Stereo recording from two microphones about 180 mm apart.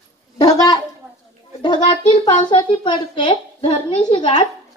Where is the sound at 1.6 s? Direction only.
25° left (ahead or behind).